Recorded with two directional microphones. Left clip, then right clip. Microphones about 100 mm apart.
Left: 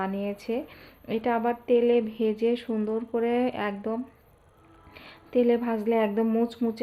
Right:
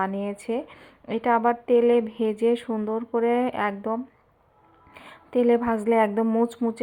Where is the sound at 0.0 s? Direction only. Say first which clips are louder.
Right 3 dB; 30° right (ahead or behind).